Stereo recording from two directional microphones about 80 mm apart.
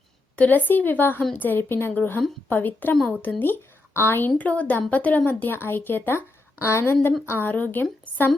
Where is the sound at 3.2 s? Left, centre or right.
Left.